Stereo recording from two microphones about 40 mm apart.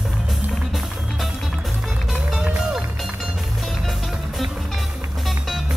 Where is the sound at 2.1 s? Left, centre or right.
Centre.